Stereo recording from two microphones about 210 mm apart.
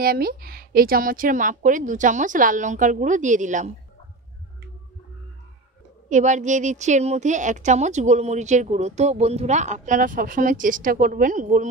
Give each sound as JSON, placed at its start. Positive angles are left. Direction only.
{"t": 0.0, "sound": "a woman's voice", "side_deg": -45}
{"t": 6.0, "sound": "a woman's voice", "side_deg": -35}